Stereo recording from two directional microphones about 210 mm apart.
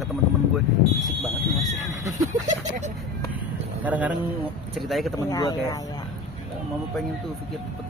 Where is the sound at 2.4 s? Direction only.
35° right (ahead or behind).